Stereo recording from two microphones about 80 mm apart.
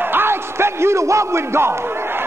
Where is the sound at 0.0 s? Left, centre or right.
Right.